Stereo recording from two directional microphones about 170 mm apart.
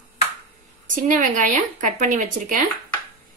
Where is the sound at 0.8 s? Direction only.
50° right (ahead or behind).